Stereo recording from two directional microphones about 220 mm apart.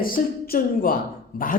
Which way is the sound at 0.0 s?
40° left (ahead or behind).